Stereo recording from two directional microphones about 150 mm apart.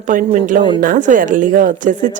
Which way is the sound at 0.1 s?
60° right (ahead or behind).